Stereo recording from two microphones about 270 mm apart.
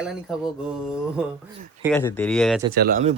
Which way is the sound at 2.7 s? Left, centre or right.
Right.